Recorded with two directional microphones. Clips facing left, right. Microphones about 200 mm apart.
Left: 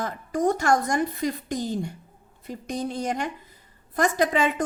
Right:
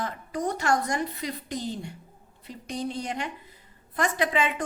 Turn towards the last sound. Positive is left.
turn(degrees=40)  # may be behind; listen again after turning